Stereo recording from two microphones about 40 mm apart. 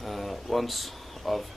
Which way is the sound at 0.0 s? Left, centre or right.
Centre.